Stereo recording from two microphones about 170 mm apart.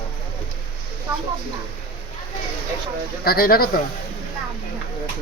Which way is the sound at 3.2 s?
60° left (ahead or behind).